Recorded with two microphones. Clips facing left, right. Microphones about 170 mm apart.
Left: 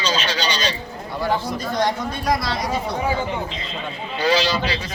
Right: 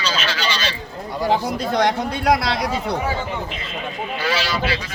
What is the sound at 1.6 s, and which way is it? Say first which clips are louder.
Speech: right 3 dB; 70° right (ahead or behind).